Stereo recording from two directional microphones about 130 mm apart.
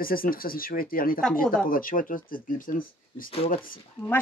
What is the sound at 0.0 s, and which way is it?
Speech, 90° left.